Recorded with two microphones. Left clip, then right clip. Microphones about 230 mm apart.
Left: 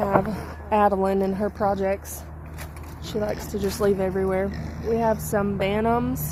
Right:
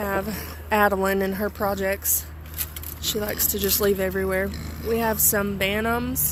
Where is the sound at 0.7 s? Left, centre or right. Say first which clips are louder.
Even; right.